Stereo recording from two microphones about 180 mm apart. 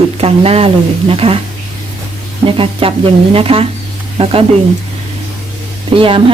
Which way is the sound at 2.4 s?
30° right (ahead or behind).